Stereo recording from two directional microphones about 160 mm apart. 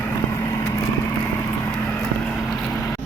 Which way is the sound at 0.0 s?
15° left (ahead or behind).